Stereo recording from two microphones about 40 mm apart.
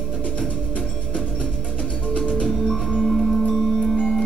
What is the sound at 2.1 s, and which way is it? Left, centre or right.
Music, left.